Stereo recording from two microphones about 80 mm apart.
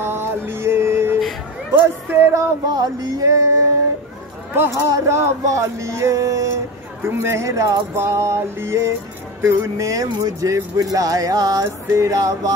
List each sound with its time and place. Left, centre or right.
0.0 s music: right
1.8 s speech: right
2.7 s speech: right
4.6 s speech: right
11.9 s speech: right